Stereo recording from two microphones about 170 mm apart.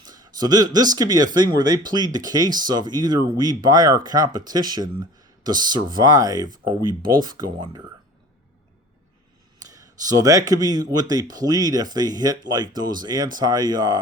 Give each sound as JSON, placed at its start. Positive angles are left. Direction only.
{"t": 0.0, "sound": "speech", "side_deg": -25}
{"t": 9.6, "sound": "speech", "side_deg": -20}